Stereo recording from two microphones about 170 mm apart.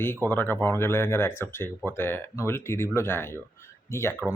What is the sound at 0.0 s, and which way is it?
Speech, 15° left (ahead or behind).